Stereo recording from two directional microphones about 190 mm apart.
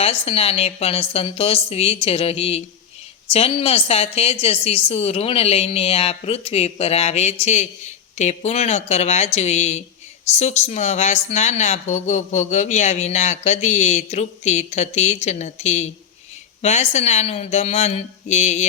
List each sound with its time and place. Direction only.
0.0 s speech: 30° left (ahead or behind)